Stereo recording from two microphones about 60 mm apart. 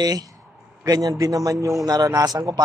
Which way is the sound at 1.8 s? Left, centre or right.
Right.